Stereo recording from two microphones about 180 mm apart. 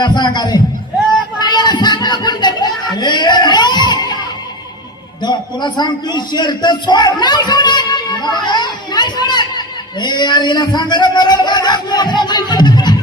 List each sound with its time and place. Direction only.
0.0 s a man's voice: 25° left (ahead or behind)
1.1 s a sound: 25° left (ahead or behind)
5.2 s a man's voice: 25° left (ahead or behind)